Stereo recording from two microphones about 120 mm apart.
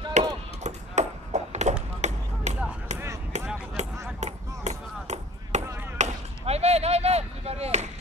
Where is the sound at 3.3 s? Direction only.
75° right (ahead or behind).